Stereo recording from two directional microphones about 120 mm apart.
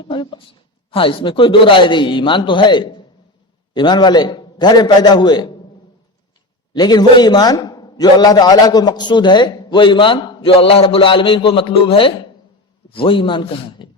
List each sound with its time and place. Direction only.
0.1 s a man's voice: 40° left (ahead or behind)
6.7 s a man's voice: 35° left (ahead or behind)
10.5 s a man's voice: 50° left (ahead or behind)